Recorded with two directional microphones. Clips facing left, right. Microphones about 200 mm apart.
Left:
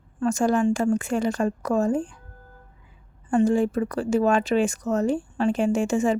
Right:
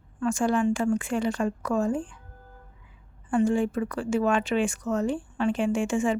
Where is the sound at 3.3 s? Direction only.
40° left (ahead or behind).